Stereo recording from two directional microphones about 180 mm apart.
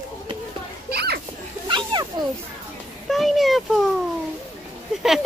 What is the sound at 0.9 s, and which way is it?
Children playing, 65° right (ahead or behind).